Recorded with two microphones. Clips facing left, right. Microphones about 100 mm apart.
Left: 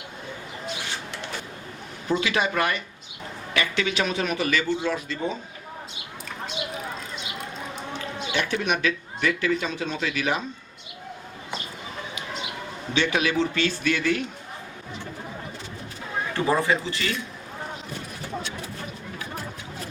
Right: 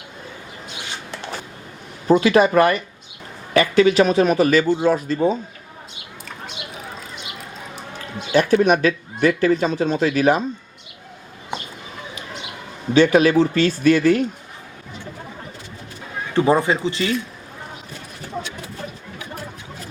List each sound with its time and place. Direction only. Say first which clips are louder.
2.0 s a man's voice: right 10 dB; 40° right (ahead or behind)
7.9 s speech: right 10 dB; 40° right (ahead or behind)
12.9 s a man's voice: right 10 dB; 40° right (ahead or behind)
16.3 s speech: right 6 dB; 20° right (ahead or behind)